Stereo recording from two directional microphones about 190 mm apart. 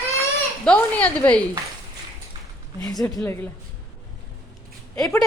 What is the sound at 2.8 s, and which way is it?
Speech, 20° left (ahead or behind).